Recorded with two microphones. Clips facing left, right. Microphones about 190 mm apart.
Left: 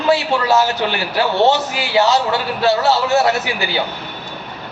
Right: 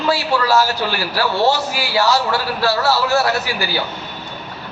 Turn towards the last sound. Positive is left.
turn(degrees=20)  # may be behind; listen again after turning